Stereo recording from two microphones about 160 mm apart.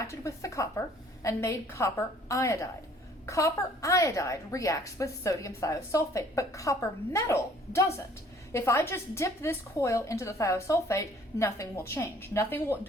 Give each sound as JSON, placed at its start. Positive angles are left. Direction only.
{"t": 0.0, "sound": "a woman's voice", "side_deg": 20}